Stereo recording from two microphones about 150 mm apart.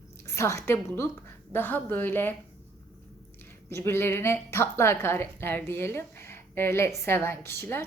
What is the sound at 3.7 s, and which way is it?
A woman's voice, 15° left (ahead or behind).